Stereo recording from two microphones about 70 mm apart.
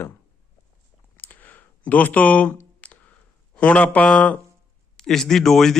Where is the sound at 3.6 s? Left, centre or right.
Centre.